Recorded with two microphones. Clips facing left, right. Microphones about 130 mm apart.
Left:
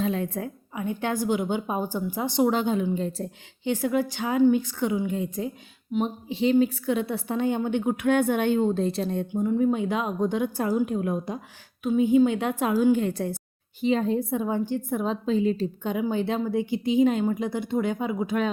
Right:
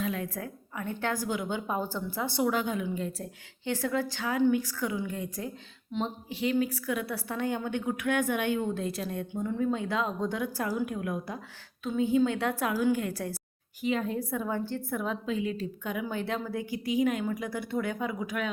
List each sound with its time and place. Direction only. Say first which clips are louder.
0.0 s a woman's voice: left 6 dB; 25° left (ahead or behind)
9.3 s a woman's voice: left 6 dB; 15° left (ahead or behind)
11.8 s a woman's voice: left 6 dB; 15° left (ahead or behind)